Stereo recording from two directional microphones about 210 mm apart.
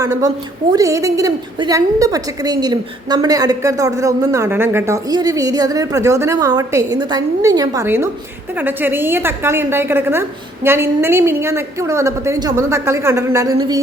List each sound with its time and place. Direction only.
0.0 s a woman's voice: 15° right (ahead or behind)